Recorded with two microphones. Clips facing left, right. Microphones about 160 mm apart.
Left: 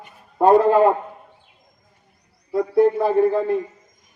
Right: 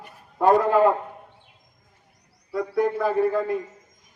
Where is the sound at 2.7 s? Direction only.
25° left (ahead or behind).